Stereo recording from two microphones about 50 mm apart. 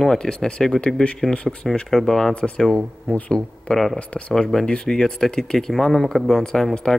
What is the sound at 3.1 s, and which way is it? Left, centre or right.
Speech, left.